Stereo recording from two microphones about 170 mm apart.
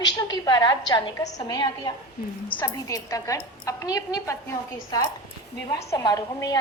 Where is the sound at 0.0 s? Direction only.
25° left (ahead or behind).